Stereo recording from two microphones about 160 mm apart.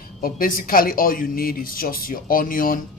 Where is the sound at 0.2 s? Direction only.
65° left (ahead or behind).